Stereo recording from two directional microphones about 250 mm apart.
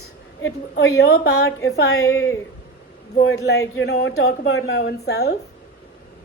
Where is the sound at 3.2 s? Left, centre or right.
Left.